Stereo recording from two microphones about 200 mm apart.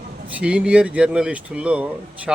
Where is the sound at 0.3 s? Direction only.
5° right (ahead or behind).